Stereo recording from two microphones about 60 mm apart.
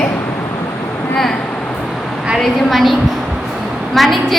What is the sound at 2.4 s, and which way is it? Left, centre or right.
Speech, centre.